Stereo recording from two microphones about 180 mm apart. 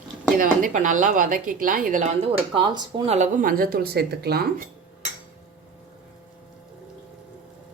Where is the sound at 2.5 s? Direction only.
30° right (ahead or behind); by 4.4 s 60° right (ahead or behind).